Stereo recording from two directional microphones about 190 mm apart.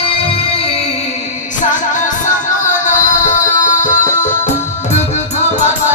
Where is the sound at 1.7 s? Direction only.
45° left (ahead or behind).